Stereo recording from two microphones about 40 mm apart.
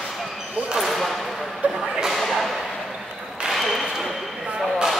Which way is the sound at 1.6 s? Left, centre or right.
Right.